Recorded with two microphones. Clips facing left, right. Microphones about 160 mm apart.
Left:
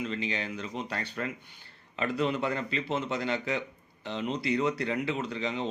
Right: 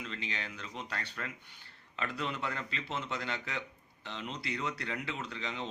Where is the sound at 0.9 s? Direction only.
25° left (ahead or behind).